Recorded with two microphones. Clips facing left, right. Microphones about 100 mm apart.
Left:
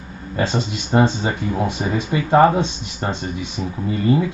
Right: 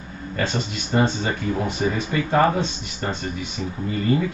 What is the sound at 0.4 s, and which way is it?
Speech, 20° left (ahead or behind).